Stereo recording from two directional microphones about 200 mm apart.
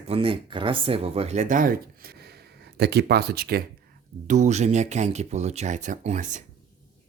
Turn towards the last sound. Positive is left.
turn(degrees=-40)  # may be behind; listen again after turning